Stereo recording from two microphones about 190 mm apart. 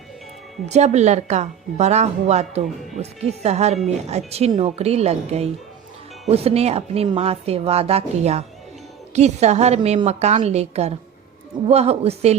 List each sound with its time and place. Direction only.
0.6 s speech: 35° right (ahead or behind)